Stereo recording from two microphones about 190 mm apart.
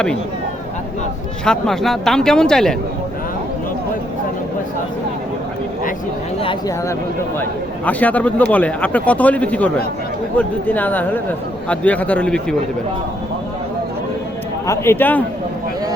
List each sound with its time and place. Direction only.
1.5 s speech: centre (ahead or behind)
6.4 s speech: 25° left (ahead or behind)
7.9 s speech: 10° left (ahead or behind)
14.7 s speech: 10° left (ahead or behind)